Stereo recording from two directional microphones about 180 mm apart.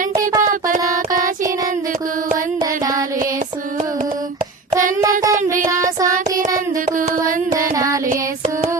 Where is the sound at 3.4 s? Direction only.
45° right (ahead or behind).